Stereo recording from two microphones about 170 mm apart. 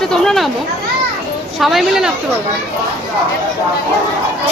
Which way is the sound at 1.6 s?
Centre (ahead or behind).